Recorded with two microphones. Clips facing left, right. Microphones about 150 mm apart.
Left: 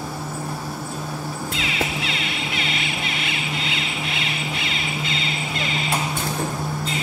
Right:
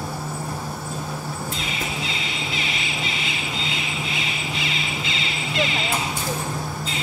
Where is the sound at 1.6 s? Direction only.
65° left (ahead or behind).